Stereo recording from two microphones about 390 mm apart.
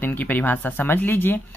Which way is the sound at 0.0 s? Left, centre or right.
Centre.